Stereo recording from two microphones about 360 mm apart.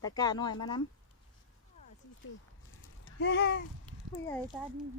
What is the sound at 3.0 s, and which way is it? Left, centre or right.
Speech, left.